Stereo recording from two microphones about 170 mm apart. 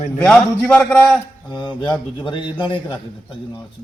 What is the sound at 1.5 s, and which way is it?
A man's voice, 25° left (ahead or behind).